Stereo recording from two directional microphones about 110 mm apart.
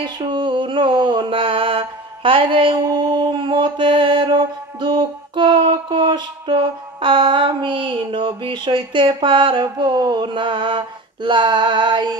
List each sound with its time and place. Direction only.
0.0 s mantra: 45° right (ahead or behind)
11.2 s female singing: 45° right (ahead or behind)